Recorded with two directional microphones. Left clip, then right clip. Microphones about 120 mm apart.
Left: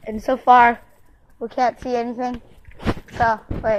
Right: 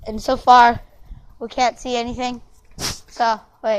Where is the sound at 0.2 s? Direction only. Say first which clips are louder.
Right 2 dB; 40° right (ahead or behind).